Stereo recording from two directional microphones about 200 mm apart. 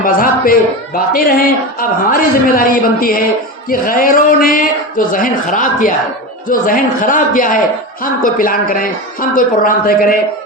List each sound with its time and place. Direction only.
0.0 s a man's voice: 45° left (ahead or behind)